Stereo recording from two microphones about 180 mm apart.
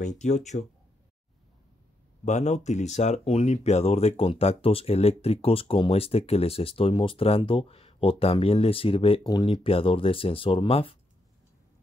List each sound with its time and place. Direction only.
0.0 s speech: 40° left (ahead or behind)
2.2 s speech: 40° left (ahead or behind)